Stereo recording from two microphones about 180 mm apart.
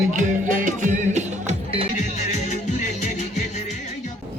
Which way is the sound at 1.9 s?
40° left (ahead or behind).